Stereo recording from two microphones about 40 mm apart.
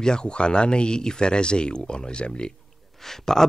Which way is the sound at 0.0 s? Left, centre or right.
Left.